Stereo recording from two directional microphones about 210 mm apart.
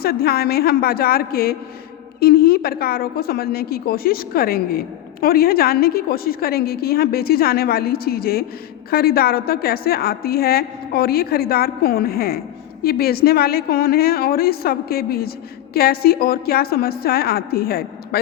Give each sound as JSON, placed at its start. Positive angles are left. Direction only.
{"t": 0.0, "sound": "a woman's voice", "side_deg": 45}